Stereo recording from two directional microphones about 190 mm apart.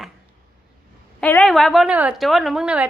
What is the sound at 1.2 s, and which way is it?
A woman's voice, 5° left (ahead or behind).